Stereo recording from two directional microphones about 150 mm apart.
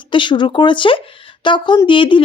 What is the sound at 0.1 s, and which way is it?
A woman's voice, 30° left (ahead or behind).